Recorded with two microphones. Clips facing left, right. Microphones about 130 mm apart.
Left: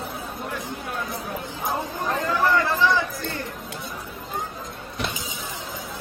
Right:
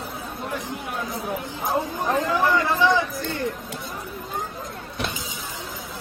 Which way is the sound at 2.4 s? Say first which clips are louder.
Left 2 dB; 15° right (ahead or behind).